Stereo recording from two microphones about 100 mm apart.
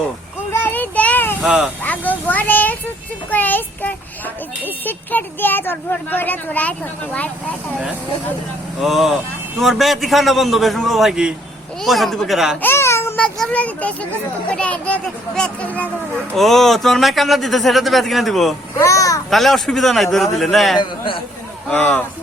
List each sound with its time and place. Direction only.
0.5 s child singing: 20° left (ahead or behind)
1.4 s speech: 10° right (ahead or behind)
1.8 s a sound: 15° left (ahead or behind)
3.2 s speech: 15° left (ahead or behind)
8.8 s speech: 5° right (ahead or behind)
12.6 s child singing: 25° left (ahead or behind)
13.1 s speech: 10° left (ahead or behind)
18.8 s a child's voice: 30° left (ahead or behind)
19.3 s speech: centre (ahead or behind)
20.7 s a man's voice: 55° left (ahead or behind)
21.7 s speech: 15° left (ahead or behind)